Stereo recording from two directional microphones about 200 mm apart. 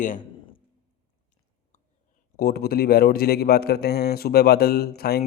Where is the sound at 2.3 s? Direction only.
50° left (ahead or behind).